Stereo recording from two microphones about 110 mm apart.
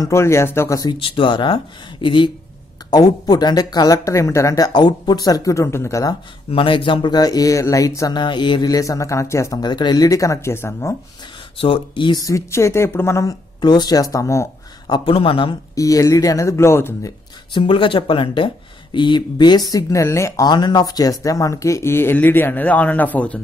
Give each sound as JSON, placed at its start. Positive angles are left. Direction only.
{"t": 0.0, "sound": "speech", "side_deg": 25}
{"t": 0.8, "sound": "speech", "side_deg": 50}
{"t": 2.9, "sound": "speech", "side_deg": 35}
{"t": 6.5, "sound": "speech", "side_deg": 50}
{"t": 8.2, "sound": "speech", "side_deg": 45}
{"t": 10.0, "sound": "speech", "side_deg": 30}
{"t": 11.5, "sound": "speech", "side_deg": 55}
{"t": 12.2, "sound": "speech", "side_deg": 30}
{"t": 14.9, "sound": "speech", "side_deg": 55}
{"t": 15.7, "sound": "speech", "side_deg": 30}
{"t": 17.6, "sound": "speech", "side_deg": 50}
{"t": 19.7, "sound": "speech", "side_deg": 30}